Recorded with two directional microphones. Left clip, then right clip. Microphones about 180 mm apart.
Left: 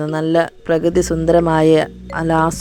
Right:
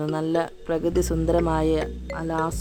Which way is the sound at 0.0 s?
30° left (ahead or behind).